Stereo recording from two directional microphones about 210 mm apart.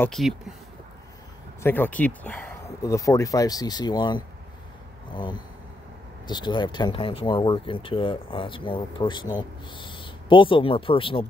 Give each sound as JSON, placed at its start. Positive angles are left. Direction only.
{"t": 0.0, "sound": "speech", "side_deg": 0}
{"t": 1.6, "sound": "speech", "side_deg": 10}